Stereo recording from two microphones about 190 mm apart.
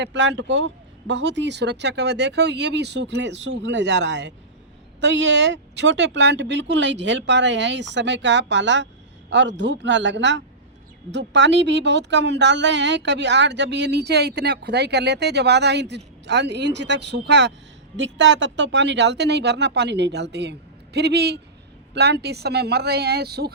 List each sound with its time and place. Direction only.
0.0 s a woman's voice: 70° right (ahead or behind)